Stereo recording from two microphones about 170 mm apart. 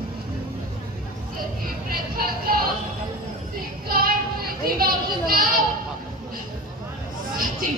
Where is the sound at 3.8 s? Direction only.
60° right (ahead or behind).